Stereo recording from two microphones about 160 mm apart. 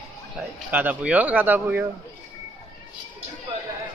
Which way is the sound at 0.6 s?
10° right (ahead or behind).